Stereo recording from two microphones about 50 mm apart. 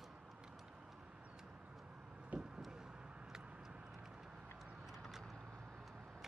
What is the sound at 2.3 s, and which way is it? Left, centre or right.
Vehicle, right.